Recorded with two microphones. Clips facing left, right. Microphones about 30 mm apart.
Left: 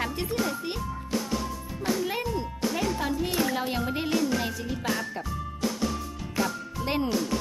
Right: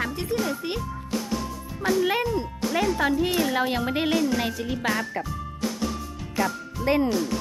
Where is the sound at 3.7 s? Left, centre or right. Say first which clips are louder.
Right 4 dB; right.